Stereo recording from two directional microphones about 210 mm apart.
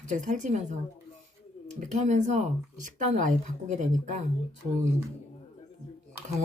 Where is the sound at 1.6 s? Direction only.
35° right (ahead or behind).